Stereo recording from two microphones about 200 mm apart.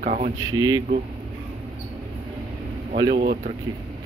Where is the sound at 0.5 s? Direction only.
20° right (ahead or behind).